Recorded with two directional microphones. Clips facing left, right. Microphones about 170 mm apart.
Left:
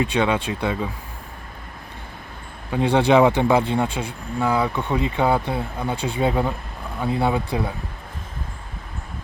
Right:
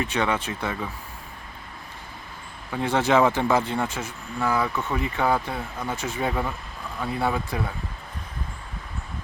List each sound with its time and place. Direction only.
0.0 s speech: 15° left (ahead or behind)
2.7 s speech: 15° left (ahead or behind)